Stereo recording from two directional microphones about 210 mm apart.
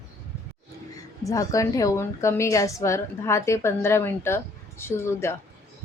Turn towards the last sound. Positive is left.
turn(degrees=10)  # may be behind; listen again after turning